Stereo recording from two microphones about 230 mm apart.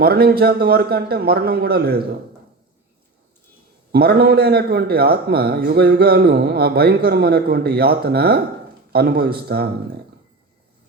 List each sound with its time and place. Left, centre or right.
0.0 s a man's voice: right
3.9 s a man's voice: right